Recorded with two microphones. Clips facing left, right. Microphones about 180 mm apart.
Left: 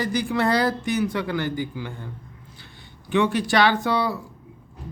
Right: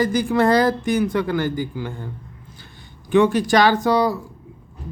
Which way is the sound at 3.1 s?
45° right (ahead or behind).